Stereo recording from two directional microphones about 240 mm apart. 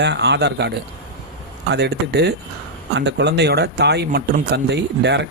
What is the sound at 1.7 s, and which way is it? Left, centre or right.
Speech, right.